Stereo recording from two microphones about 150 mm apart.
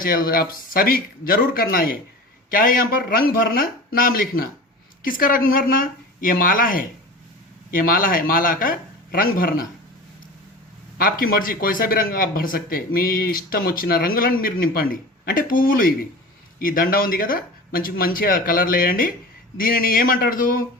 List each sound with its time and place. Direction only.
0.0 s speech: 70° left (ahead or behind)
10.9 s speech: 75° left (ahead or behind)